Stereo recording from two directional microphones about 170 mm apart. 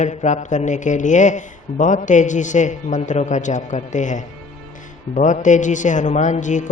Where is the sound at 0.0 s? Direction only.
40° left (ahead or behind).